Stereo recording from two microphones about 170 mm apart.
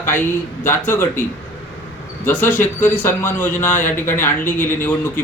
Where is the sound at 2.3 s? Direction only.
10° left (ahead or behind).